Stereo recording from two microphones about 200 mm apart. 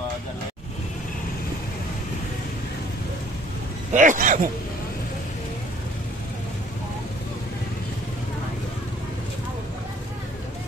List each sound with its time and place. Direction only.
3.9 s speech: 40° right (ahead or behind)